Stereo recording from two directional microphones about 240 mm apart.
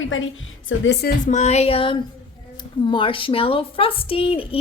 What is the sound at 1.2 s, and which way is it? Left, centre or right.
A woman's voice, left.